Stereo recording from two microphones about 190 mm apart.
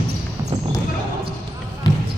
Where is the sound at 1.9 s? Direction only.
20° left (ahead or behind).